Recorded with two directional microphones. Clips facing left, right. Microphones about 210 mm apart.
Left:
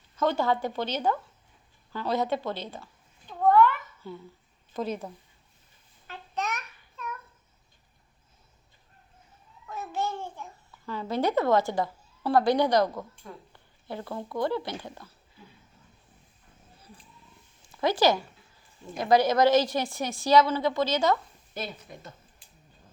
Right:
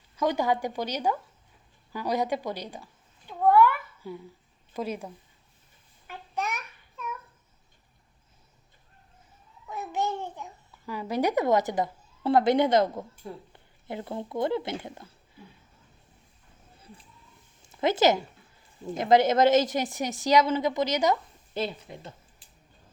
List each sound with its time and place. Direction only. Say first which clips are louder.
0.2 s speech: even; 15° right (ahead or behind)
1.9 s cat: even; 10° right (ahead or behind)
4.7 s a woman's voice: left 1 dB; 10° right (ahead or behind)
6.1 s babbling: even; 10° right (ahead or behind)
9.6 s a child's voice: right 2 dB; 15° right (ahead or behind)
17.7 s a woman's voice: right 1 dB; 25° right (ahead or behind)
21.6 s a woman's voice: right 5 dB; 25° right (ahead or behind)